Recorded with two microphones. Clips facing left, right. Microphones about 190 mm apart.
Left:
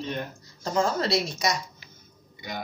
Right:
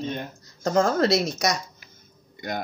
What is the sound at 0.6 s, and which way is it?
A man's voice, 50° right (ahead or behind).